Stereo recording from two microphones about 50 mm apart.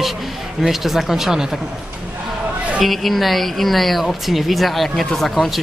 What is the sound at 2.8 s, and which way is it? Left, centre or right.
A woman's voice, centre.